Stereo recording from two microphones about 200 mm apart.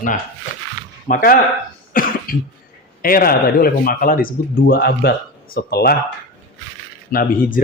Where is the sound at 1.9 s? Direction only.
45° left (ahead or behind).